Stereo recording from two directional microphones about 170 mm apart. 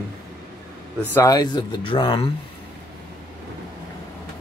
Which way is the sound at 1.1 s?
20° left (ahead or behind).